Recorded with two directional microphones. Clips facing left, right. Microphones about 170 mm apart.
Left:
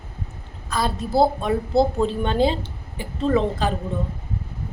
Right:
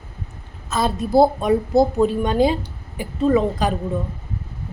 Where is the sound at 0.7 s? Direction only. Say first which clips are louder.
Right 4 dB; 20° right (ahead or behind).